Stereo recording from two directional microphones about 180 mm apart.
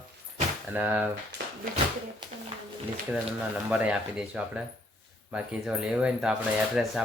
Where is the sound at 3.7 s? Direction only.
5° right (ahead or behind).